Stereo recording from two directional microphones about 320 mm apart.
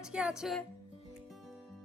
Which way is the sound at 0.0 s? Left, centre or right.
Centre.